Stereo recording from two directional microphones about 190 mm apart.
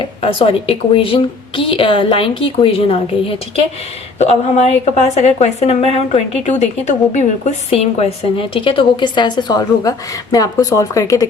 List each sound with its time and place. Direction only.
0.0 s a woman's voice: 30° left (ahead or behind)